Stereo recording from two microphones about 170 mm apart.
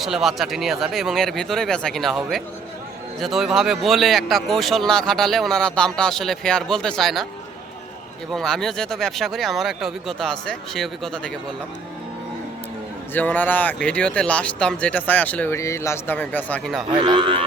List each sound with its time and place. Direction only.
0.0 s speech: centre (ahead or behind)
8.3 s speech: centre (ahead or behind)
13.1 s speech: 10° left (ahead or behind)
16.9 s speech: 30° right (ahead or behind)